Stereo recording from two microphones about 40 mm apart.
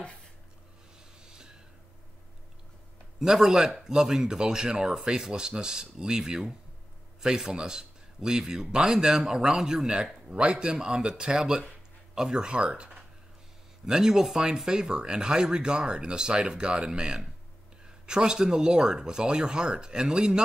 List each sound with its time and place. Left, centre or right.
1.2 s gasp: centre
3.2 s a man's voice: centre
13.8 s a man's voice: centre